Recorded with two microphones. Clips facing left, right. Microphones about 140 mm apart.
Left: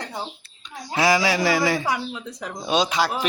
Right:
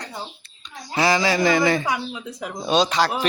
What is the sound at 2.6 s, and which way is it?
Speech, 5° left (ahead or behind).